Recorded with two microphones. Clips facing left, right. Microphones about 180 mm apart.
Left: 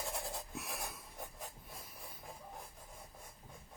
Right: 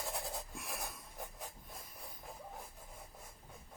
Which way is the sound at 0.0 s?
Centre (ahead or behind).